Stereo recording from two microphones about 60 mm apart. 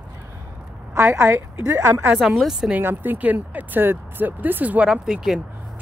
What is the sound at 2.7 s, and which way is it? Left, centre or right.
Speech, right.